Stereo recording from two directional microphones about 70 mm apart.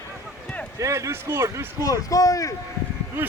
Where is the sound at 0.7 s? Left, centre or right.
Right.